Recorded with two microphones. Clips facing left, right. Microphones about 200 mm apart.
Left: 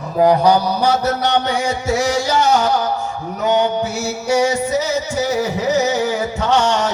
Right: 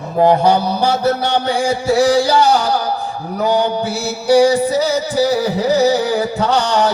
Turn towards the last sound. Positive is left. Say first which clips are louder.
# right 1 dB
turn(degrees=-35)  # may be behind; listen again after turning